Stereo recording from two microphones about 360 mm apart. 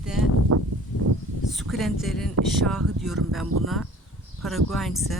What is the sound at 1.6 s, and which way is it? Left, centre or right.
Speech, centre.